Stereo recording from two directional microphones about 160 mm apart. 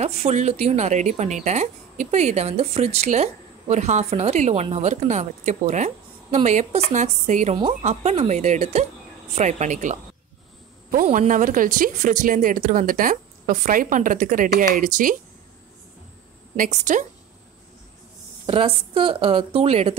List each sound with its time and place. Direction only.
0.0 s a woman's voice: 45° right (ahead or behind)
16.5 s a woman's voice: 50° right (ahead or behind)
18.4 s speech: 35° right (ahead or behind)